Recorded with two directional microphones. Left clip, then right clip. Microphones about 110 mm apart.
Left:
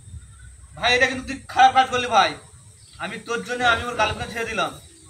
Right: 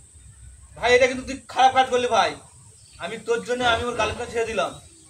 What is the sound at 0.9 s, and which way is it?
A man's voice, 30° right (ahead or behind).